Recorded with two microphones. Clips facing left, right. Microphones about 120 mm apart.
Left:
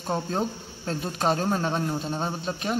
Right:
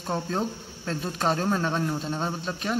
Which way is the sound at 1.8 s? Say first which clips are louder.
Even; 10° left (ahead or behind).